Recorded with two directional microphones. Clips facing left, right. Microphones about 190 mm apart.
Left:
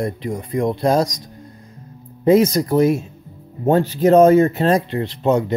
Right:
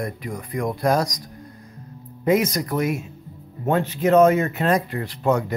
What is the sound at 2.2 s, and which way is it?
Speech, 30° left (ahead or behind).